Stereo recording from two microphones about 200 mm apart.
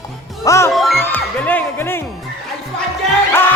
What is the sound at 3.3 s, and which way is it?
Speech, 10° left (ahead or behind).